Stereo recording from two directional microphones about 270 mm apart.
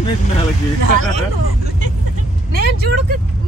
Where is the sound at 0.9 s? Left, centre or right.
Right.